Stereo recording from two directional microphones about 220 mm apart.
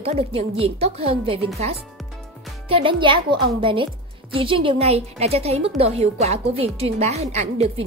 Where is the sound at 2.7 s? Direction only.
25° right (ahead or behind).